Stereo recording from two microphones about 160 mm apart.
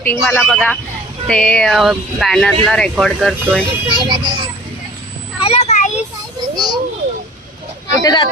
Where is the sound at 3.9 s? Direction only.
30° right (ahead or behind).